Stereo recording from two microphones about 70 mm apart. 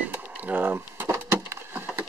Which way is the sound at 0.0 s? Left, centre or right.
Right.